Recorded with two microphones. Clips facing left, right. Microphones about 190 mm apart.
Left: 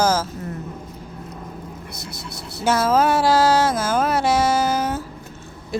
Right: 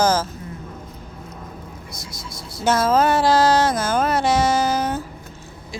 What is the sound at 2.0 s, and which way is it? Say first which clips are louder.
Vehicle: left 2 dB; 65° left (ahead or behind).